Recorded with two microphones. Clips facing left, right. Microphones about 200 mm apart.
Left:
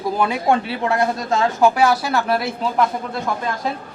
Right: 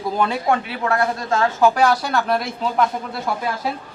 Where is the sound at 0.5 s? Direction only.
20° left (ahead or behind).